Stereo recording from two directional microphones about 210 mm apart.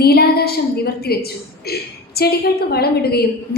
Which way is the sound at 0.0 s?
50° left (ahead or behind).